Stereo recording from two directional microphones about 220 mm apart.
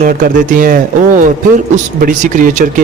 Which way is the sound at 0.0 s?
40° right (ahead or behind).